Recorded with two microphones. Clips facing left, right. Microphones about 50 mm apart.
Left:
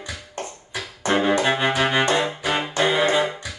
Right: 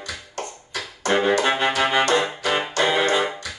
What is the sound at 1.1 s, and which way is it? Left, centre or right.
Music, centre.